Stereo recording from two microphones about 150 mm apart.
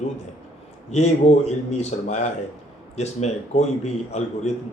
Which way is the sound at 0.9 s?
50° left (ahead or behind).